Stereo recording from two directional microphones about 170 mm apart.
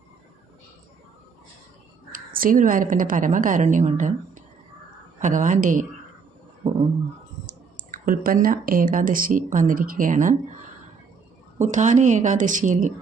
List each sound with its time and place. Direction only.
2.1 s a woman's voice: 55° right (ahead or behind)
7.4 s speech: 55° right (ahead or behind)
11.6 s speech: 45° right (ahead or behind)